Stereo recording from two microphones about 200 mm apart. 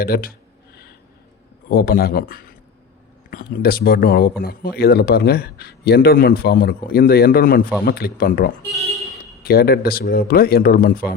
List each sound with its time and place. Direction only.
0.0 s speech: 50° left (ahead or behind)
1.7 s speech: 50° left (ahead or behind)